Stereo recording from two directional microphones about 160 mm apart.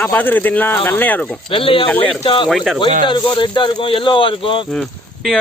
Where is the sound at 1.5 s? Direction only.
35° left (ahead or behind).